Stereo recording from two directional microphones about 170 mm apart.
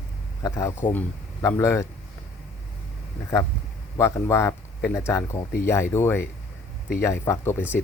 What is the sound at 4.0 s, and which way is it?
Speech, 15° left (ahead or behind).